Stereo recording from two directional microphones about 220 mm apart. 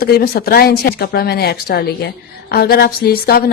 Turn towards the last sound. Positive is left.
turn(degrees=45)  # may be behind; listen again after turning